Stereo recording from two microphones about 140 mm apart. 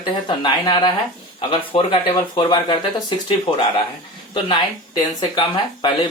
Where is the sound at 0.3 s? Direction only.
35° left (ahead or behind).